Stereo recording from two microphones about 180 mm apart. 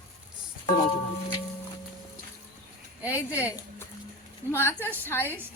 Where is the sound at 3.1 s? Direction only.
15° left (ahead or behind).